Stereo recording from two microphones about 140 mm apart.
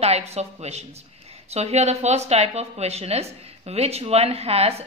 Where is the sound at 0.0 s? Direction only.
50° right (ahead or behind).